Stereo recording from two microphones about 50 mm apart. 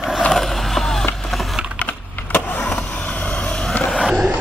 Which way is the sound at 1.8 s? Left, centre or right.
Left.